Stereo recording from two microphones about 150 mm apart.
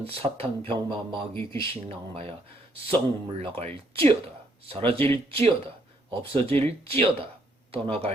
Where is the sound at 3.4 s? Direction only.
40° right (ahead or behind).